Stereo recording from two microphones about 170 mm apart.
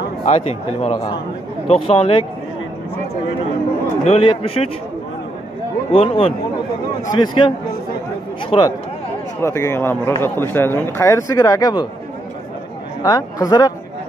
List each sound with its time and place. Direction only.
0.2 s speech: 40° left (ahead or behind)
4.0 s speech: 35° left (ahead or behind)
5.9 s speech: 35° left (ahead or behind)
13.0 s speech: 20° left (ahead or behind)